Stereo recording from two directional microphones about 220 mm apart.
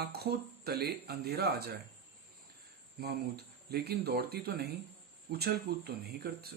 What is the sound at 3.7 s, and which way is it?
Speech, 45° right (ahead or behind).